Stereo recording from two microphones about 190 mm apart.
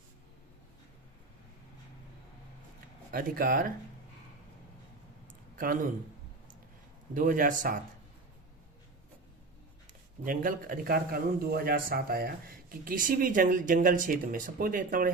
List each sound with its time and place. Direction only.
3.1 s a man's voice: 50° right (ahead or behind)
7.1 s a man's voice: 45° right (ahead or behind)
10.2 s a man's voice: 50° right (ahead or behind)